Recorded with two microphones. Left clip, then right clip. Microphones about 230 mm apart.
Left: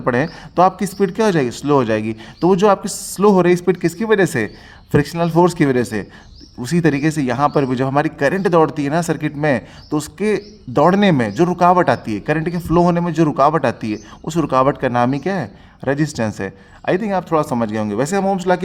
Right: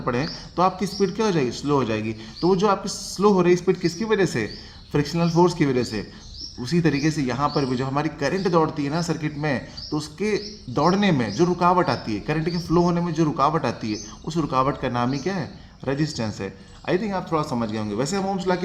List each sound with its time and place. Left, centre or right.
0.0 s a man's voice: left